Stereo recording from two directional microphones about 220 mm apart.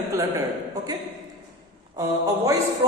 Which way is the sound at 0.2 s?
15° right (ahead or behind).